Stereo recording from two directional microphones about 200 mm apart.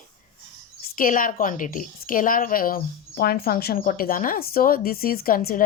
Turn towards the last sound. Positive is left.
turn(degrees=45)  # may be behind; listen again after turning